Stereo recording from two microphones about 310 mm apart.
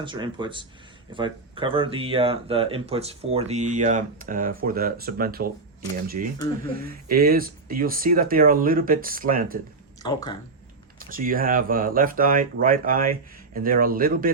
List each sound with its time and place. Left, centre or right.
0.0 s speech: centre
6.8 s speech: right
10.0 s speech: centre
11.0 s speech: right